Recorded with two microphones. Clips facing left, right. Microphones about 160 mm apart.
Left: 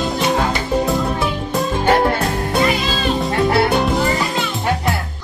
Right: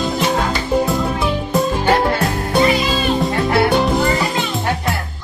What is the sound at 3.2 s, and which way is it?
Music, centre (ahead or behind).